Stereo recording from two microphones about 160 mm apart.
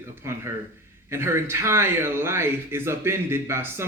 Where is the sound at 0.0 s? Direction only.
15° right (ahead or behind).